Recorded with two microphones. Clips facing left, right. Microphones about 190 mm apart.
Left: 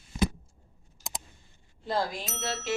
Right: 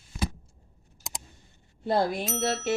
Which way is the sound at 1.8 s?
60° right (ahead or behind).